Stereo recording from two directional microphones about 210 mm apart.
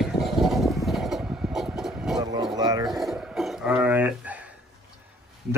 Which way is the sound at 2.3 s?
20° right (ahead or behind).